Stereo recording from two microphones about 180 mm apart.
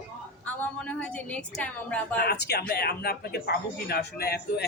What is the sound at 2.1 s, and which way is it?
Speech, 65° left (ahead or behind).